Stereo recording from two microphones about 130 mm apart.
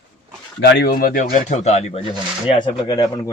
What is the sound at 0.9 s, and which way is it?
Speech, 90° left.